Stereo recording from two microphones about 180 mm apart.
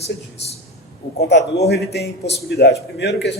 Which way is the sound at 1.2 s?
70° left (ahead or behind).